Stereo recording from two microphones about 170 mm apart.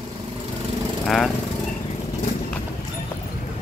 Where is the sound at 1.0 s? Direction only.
Centre (ahead or behind).